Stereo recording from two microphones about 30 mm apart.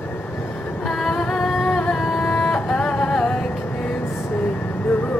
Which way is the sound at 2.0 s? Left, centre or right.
Centre.